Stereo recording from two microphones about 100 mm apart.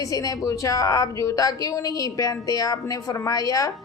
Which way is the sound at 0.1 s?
35° left (ahead or behind).